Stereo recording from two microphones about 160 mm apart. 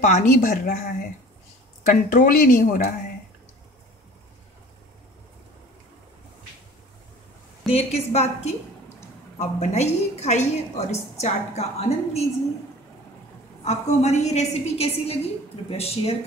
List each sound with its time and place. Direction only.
0.1 s a woman's voice: 50° left (ahead or behind)
7.6 s a woman's voice: 40° left (ahead or behind)
13.7 s a woman's voice: 45° left (ahead or behind)